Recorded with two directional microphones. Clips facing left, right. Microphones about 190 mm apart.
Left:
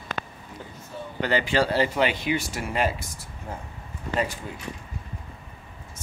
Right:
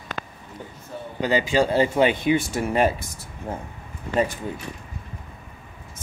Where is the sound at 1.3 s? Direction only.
15° right (ahead or behind); by 2.4 s 30° right (ahead or behind).